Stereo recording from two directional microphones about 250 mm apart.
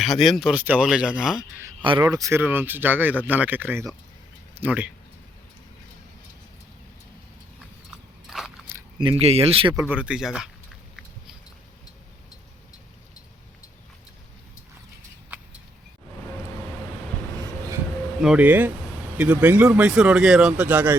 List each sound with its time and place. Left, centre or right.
0.0 s speech: centre
1.8 s speech: centre
8.3 s biting: centre
9.0 s speech: right
9.8 s speech: centre
18.2 s speech: centre